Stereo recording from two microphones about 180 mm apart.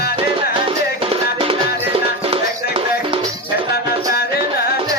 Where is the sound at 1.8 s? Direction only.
30° right (ahead or behind).